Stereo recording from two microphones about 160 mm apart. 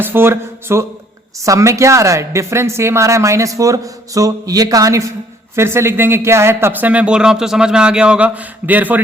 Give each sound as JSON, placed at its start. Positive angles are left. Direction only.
{"t": 0.0, "sound": "a woman's voice", "side_deg": -15}